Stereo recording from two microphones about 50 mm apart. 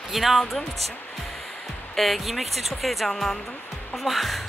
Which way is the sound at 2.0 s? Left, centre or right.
Centre.